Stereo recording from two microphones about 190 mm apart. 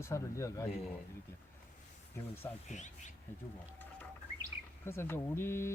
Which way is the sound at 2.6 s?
40° left (ahead or behind).